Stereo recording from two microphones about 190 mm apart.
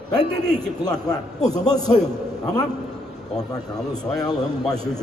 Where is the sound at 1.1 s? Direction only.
20° left (ahead or behind).